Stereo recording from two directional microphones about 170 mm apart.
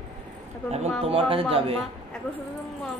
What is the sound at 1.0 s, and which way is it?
Speech, 35° right (ahead or behind).